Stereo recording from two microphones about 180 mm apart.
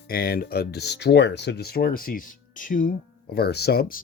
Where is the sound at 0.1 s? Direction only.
55° left (ahead or behind).